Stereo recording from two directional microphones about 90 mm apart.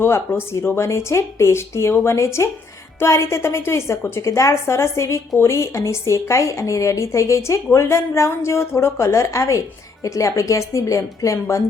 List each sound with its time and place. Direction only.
0.0 s a woman's voice: 30° left (ahead or behind)